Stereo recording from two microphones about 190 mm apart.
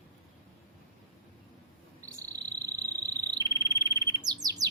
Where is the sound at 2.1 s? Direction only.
15° right (ahead or behind).